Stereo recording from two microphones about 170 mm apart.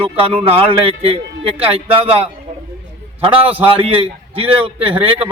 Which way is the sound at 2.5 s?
45° right (ahead or behind).